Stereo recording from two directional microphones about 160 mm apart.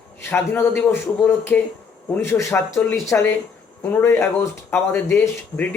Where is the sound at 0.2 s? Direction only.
15° left (ahead or behind).